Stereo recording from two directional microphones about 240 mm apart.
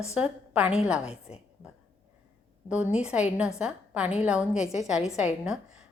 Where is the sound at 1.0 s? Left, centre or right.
Left.